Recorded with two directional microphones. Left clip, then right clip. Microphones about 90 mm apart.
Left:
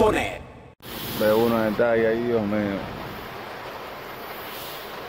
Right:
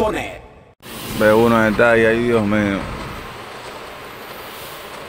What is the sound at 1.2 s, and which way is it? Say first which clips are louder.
Speech: right 7 dB; 40° right (ahead or behind).